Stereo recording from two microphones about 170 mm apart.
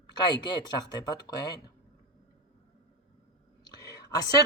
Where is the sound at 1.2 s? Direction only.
25° left (ahead or behind).